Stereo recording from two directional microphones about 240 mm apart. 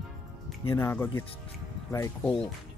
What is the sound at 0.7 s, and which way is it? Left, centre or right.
Speech, centre.